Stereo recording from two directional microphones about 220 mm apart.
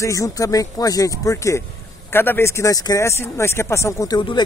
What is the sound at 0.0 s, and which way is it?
Speech, 15° left (ahead or behind).